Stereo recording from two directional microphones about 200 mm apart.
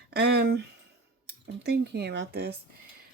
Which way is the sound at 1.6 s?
55° right (ahead or behind).